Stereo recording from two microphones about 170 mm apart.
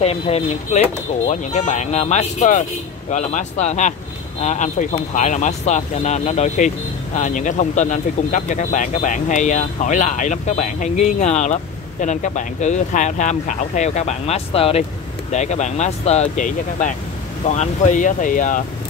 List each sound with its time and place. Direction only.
0.0 s speech: 40° left (ahead or behind)